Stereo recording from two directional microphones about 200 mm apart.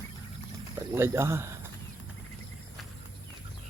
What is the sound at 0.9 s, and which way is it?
Speech, 15° right (ahead or behind).